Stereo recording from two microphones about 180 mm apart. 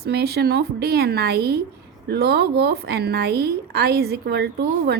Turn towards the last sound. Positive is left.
turn(degrees=-65)  # may be behind; listen again after turning